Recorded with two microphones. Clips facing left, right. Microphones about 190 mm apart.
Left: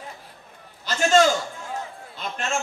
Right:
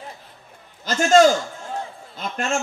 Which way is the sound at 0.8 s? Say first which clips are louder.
Right 4 dB; 45° right (ahead or behind).